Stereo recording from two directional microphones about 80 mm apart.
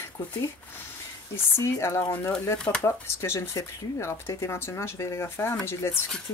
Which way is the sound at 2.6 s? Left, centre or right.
Centre.